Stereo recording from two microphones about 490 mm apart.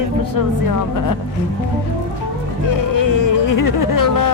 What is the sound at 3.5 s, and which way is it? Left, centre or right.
Music, left.